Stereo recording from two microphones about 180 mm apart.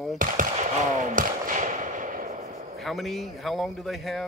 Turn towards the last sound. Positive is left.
turn(degrees=0)  # may be behind; listen again after turning